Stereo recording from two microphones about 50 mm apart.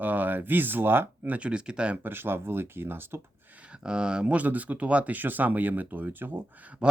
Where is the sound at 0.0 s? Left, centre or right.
Right.